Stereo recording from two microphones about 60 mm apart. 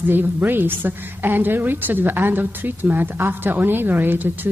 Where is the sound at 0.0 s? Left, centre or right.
Right.